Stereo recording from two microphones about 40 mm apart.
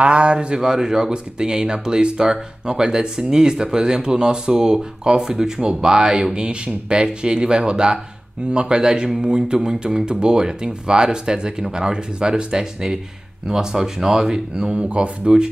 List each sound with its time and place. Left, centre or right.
0.0 s speech: right